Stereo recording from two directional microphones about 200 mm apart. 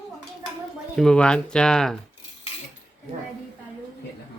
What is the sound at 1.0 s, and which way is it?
Speech, 5° left (ahead or behind).